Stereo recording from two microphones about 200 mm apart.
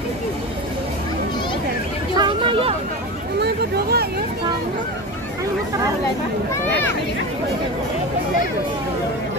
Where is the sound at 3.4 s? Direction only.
55° right (ahead or behind).